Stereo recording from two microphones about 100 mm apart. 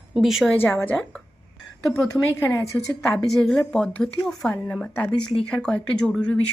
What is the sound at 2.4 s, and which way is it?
Speech, 30° left (ahead or behind).